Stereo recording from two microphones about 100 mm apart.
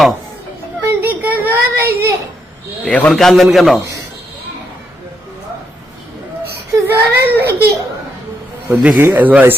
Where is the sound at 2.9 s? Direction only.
10° left (ahead or behind).